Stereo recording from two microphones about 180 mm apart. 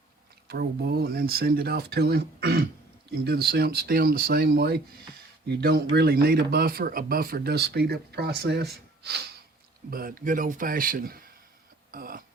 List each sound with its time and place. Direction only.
0.4 s speech: 60° right (ahead or behind)
9.9 s speech: 55° right (ahead or behind)